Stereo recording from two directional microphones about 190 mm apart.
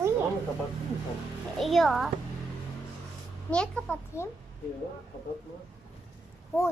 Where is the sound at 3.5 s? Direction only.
5° left (ahead or behind).